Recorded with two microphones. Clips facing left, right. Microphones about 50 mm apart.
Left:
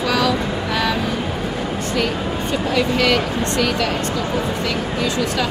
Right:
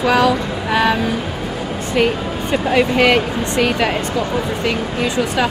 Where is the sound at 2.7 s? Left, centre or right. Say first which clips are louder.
Right 4 dB; right.